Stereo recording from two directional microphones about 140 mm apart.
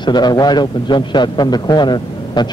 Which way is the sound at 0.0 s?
30° left (ahead or behind).